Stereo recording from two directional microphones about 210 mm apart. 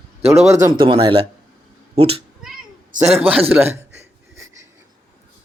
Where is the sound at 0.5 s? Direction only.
20° right (ahead or behind).